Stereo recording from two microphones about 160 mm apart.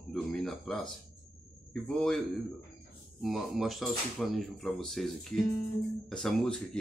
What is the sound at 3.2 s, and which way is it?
Speech, centre (ahead or behind).